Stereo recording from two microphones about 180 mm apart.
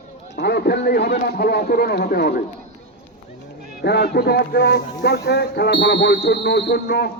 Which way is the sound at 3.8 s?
65° left (ahead or behind).